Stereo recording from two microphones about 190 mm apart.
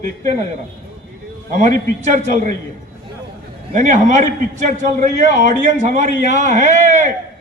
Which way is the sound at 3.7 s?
40° right (ahead or behind).